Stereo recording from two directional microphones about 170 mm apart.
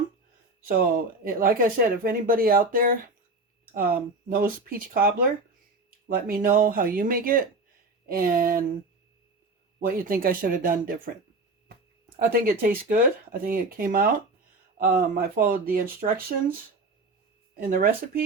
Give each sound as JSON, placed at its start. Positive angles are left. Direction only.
{"t": 0.6, "sound": "speech", "side_deg": -60}
{"t": 6.1, "sound": "speech", "side_deg": -60}
{"t": 9.8, "sound": "speech", "side_deg": -60}
{"t": 12.3, "sound": "speech", "side_deg": -55}
{"t": 17.7, "sound": "speech", "side_deg": -55}